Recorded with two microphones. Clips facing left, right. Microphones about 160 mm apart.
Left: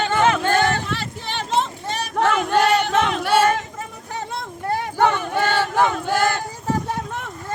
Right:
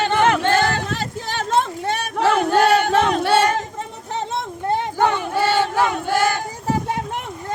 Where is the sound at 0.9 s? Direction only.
45° right (ahead or behind).